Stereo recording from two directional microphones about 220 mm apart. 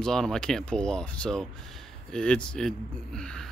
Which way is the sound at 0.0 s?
Centre (ahead or behind).